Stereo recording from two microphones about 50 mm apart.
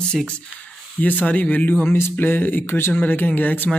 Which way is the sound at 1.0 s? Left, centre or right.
Left.